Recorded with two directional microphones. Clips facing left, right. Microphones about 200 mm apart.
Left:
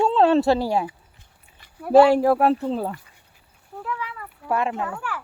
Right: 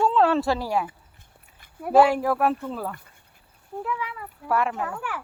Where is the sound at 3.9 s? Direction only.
5° right (ahead or behind).